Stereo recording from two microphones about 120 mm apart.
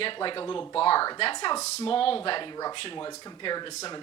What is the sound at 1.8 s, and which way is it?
Speech, 50° left (ahead or behind).